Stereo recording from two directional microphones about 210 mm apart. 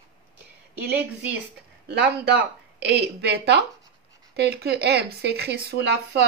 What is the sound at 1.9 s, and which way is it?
Speech, 55° right (ahead or behind).